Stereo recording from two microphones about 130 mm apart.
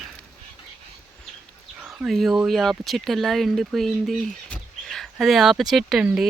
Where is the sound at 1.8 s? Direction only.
5° right (ahead or behind).